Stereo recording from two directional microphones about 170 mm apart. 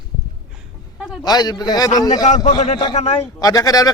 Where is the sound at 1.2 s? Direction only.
25° left (ahead or behind).